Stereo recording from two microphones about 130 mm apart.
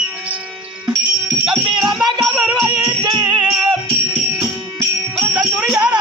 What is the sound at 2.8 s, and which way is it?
Music, 35° right (ahead or behind).